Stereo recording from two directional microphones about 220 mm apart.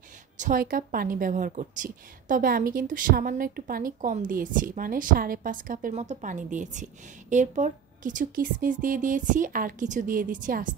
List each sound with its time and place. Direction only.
0.4 s a woman's voice: 40° right (ahead or behind)